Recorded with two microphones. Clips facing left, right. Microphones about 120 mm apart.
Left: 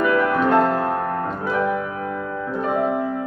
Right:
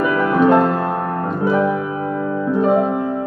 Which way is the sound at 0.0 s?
15° right (ahead or behind).